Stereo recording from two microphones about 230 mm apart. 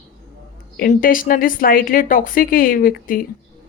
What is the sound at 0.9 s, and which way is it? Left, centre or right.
Speech, left.